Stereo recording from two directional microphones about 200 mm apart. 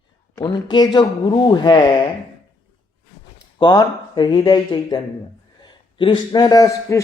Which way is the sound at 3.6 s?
20° left (ahead or behind).